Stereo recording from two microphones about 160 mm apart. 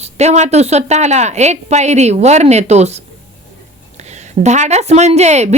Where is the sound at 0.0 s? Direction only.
45° right (ahead or behind).